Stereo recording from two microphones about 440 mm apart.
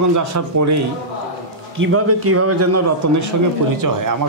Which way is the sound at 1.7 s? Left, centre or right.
Right.